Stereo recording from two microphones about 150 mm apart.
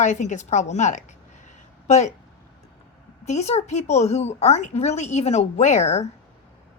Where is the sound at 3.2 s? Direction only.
50° left (ahead or behind).